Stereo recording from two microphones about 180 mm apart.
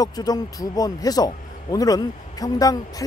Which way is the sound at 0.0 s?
20° left (ahead or behind).